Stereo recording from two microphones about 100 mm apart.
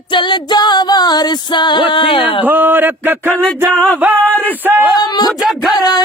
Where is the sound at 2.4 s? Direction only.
20° right (ahead or behind).